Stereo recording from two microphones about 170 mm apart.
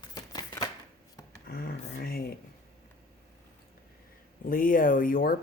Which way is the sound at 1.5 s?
60° left (ahead or behind).